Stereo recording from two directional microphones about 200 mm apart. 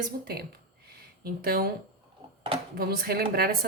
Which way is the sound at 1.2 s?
45° right (ahead or behind).